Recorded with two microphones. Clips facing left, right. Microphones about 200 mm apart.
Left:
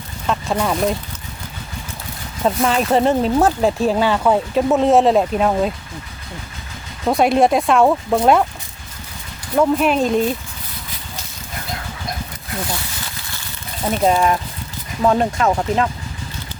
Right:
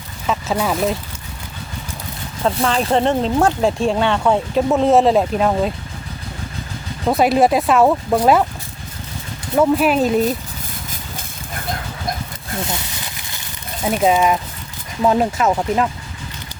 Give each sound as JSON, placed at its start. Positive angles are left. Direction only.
{"t": 0.3, "sound": "speech", "side_deg": -5}
{"t": 2.4, "sound": "speech", "side_deg": 5}
{"t": 7.1, "sound": "speech", "side_deg": 0}
{"t": 9.6, "sound": "speech", "side_deg": -5}
{"t": 12.6, "sound": "a sound", "side_deg": -20}
{"t": 13.8, "sound": "speech", "side_deg": -5}